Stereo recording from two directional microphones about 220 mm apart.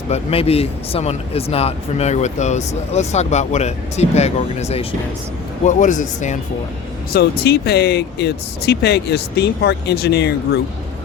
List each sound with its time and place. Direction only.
0.1 s speech: 25° left (ahead or behind)
7.1 s speech: 45° left (ahead or behind)